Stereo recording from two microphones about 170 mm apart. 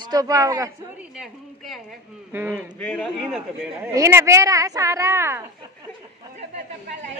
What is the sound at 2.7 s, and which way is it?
Speech, 5° left (ahead or behind).